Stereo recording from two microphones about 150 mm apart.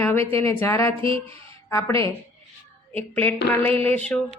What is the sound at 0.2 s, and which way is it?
Speech, 40° right (ahead or behind).